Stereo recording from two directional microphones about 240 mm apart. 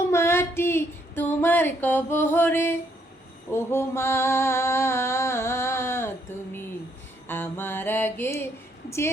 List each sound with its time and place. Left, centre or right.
0.1 s female singing: centre
3.5 s a sound: centre
7.3 s mantra: centre